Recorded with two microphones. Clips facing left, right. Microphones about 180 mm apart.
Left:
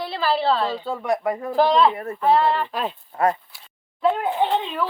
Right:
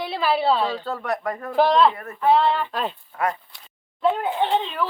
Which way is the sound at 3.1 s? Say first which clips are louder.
Left 6 dB; 35° left (ahead or behind).